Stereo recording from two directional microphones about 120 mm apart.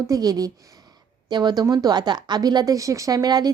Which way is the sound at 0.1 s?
30° right (ahead or behind).